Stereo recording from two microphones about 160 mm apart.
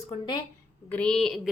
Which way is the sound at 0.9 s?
5° left (ahead or behind).